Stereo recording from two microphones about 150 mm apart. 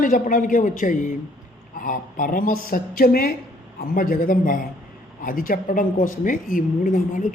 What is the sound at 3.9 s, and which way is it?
A woman's voice, 75° left (ahead or behind).